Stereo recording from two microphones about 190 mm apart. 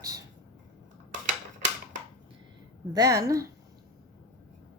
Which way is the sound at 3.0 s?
15° right (ahead or behind).